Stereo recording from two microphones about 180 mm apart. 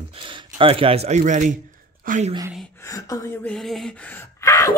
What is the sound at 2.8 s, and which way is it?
Speech, 20° left (ahead or behind).